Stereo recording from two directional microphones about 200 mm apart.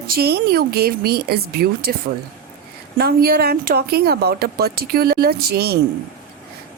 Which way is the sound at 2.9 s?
50° right (ahead or behind).